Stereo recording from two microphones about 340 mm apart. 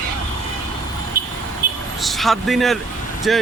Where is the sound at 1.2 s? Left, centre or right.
Right.